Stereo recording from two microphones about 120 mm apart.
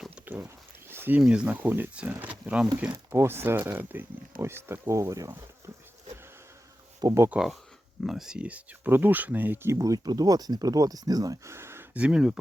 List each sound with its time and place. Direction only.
0.3 s a sound: 20° right (ahead or behind)
1.2 s speech: 10° right (ahead or behind); by 5.7 s 25° right (ahead or behind)
7.0 s speech: 25° right (ahead or behind)
7.3 s speech: 5° right (ahead or behind)
9.7 s speech: 30° right (ahead or behind)
11.9 s speech: 10° right (ahead or behind)